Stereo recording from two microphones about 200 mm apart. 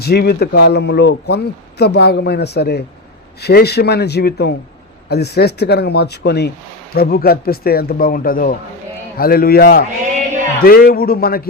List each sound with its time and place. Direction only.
0.0 s speech: 50° left (ahead or behind)